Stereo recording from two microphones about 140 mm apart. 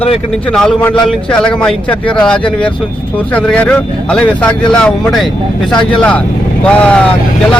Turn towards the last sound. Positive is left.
turn(degrees=10)  # may be behind; listen again after turning